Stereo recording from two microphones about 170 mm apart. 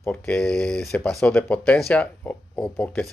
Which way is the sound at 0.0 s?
10° left (ahead or behind).